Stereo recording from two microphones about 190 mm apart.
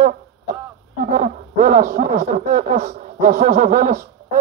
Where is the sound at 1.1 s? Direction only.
45° right (ahead or behind).